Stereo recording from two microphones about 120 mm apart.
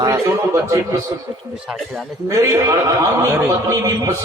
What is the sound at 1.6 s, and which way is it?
Speech, centre (ahead or behind).